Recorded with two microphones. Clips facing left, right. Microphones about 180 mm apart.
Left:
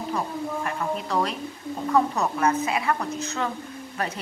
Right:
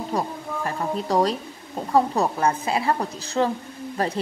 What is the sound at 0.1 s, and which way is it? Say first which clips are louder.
Speech: right 3 dB; 35° right (ahead or behind).